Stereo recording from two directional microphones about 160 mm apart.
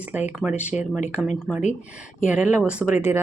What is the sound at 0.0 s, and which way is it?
Speech, 10° right (ahead or behind).